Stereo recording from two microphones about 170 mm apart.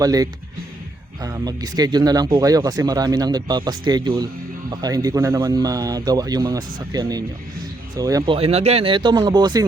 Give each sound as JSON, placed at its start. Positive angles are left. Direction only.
{"t": 0.0, "sound": "speech", "side_deg": -20}
{"t": 8.4, "sound": "speech", "side_deg": -35}